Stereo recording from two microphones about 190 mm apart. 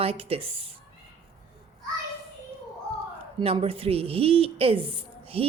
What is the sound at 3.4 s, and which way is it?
A woman's voice, 30° right (ahead or behind).